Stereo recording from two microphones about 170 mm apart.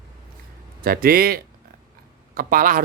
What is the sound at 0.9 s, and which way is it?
Speech, 60° right (ahead or behind).